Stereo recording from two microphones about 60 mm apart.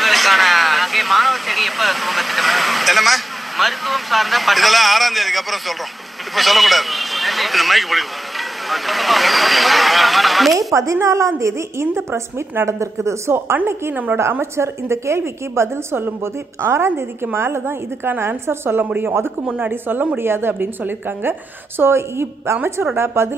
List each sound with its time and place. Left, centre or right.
0.0 s a man's voice: centre
10.7 s a woman's voice: right
11.9 s a woman's voice: right